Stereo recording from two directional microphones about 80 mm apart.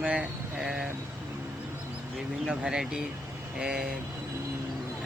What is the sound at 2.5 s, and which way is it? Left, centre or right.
Speech, centre.